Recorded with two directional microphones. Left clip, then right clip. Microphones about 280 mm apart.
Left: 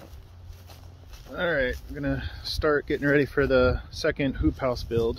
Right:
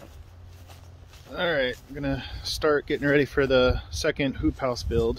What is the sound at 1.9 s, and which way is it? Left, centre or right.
Speech, centre.